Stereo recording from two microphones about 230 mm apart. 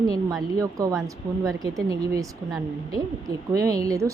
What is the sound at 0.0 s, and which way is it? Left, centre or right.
A woman's voice, centre.